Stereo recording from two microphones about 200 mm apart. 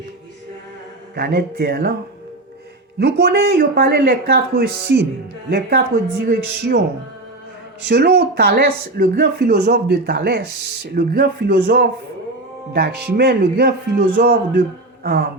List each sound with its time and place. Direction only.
1.1 s speech: 50° right (ahead or behind)
3.0 s speech: 55° right (ahead or behind)
5.5 s music: 55° right (ahead or behind)
6.2 s speech: 50° right (ahead or behind)
7.9 s speech: 55° right (ahead or behind)
12.7 s music: 55° right (ahead or behind)
14.2 s speech: 50° right (ahead or behind)